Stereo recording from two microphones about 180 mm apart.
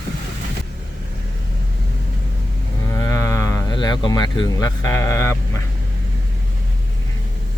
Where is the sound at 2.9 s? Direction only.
15° left (ahead or behind).